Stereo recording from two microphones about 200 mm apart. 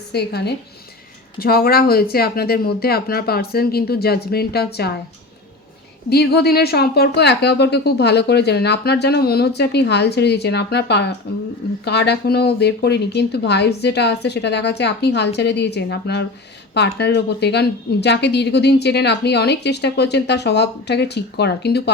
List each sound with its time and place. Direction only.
0.1 s speech: 55° left (ahead or behind)
6.1 s a woman's voice: 55° left (ahead or behind)